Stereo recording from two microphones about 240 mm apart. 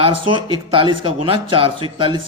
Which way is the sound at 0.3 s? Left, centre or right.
Right.